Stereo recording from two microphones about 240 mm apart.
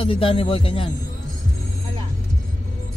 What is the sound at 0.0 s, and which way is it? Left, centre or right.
Speech, left.